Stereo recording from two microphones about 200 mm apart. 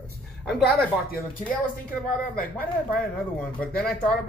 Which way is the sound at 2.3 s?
45° left (ahead or behind).